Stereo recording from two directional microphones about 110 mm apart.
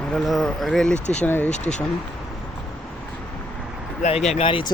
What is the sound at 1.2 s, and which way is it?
Speech, 15° left (ahead or behind).